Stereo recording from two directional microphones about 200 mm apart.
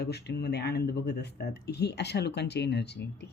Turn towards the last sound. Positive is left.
turn(degrees=55)  # may be behind; listen again after turning